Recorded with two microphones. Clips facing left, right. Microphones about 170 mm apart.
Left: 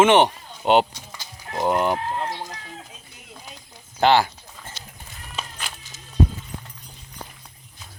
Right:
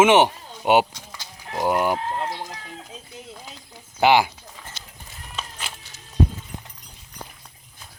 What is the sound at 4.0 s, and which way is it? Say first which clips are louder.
Speech: even; 10° right (ahead or behind).